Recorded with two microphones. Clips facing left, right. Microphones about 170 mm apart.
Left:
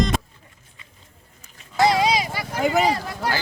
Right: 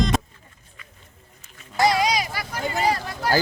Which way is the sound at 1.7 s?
25° left (ahead or behind).